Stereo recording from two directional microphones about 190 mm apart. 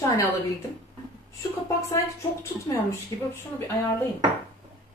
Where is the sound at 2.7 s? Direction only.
15° left (ahead or behind).